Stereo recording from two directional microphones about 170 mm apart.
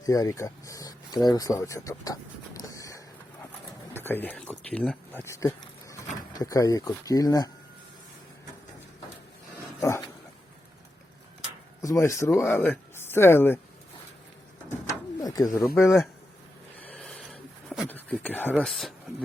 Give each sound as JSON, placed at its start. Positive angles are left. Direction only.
{"t": 0.0, "sound": "a sound", "side_deg": 20}
{"t": 3.9, "sound": "speech", "side_deg": 10}
{"t": 9.8, "sound": "dog", "side_deg": 15}
{"t": 11.8, "sound": "speech", "side_deg": 20}
{"t": 15.2, "sound": "pigeon", "side_deg": 20}
{"t": 15.7, "sound": "a man's voice", "side_deg": 15}
{"t": 16.8, "sound": "a sound", "side_deg": 5}
{"t": 18.6, "sound": "speech", "side_deg": 0}